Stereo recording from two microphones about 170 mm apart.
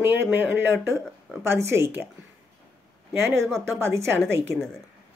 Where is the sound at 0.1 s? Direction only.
10° right (ahead or behind).